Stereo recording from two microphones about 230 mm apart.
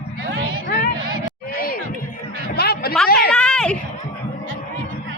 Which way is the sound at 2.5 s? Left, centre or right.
Left.